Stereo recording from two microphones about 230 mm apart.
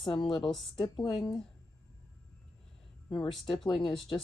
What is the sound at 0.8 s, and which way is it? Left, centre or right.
Speech, left.